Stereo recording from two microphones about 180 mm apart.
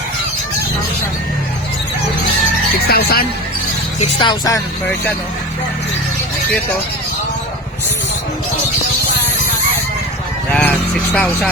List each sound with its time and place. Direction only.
2.8 s speech: 60° left (ahead or behind)
4.0 s speech: 25° left (ahead or behind)
10.5 s speech: 5° left (ahead or behind)